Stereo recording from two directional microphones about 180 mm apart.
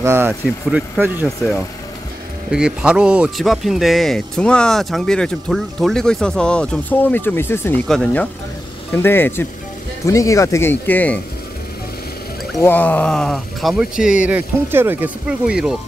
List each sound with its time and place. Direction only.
0.0 s speech: 15° right (ahead or behind); by 11.1 s 10° left (ahead or behind)
12.5 s speech: 10° left (ahead or behind)